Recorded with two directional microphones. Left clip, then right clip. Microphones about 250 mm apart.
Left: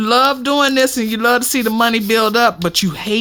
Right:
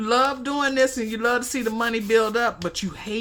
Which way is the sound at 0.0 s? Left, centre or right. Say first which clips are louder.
Left 8 dB; left.